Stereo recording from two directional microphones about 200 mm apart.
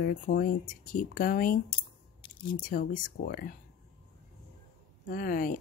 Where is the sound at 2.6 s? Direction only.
45° left (ahead or behind).